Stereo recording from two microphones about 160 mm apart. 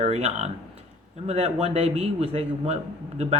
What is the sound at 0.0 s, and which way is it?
Speech, 40° right (ahead or behind).